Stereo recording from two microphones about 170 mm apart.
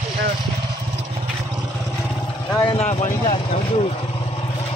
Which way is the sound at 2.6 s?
40° left (ahead or behind).